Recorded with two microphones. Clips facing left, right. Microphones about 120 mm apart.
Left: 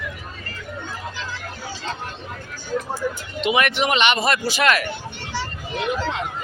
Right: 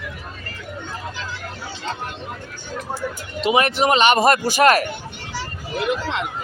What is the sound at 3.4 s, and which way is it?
A man's voice, 35° right (ahead or behind).